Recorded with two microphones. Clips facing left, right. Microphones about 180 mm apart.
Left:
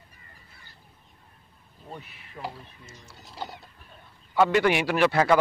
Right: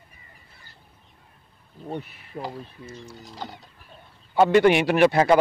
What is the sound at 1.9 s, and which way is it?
Speech, 55° right (ahead or behind).